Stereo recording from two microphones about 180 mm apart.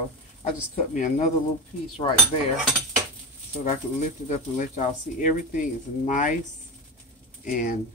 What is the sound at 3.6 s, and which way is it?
Speech, 40° left (ahead or behind).